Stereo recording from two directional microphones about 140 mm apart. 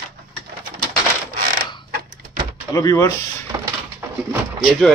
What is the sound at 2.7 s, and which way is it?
Speech, 25° left (ahead or behind).